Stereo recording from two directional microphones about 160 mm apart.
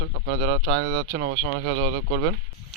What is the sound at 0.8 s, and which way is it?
Speech, 45° right (ahead or behind).